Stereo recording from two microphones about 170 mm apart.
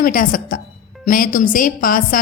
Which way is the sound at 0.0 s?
55° left (ahead or behind).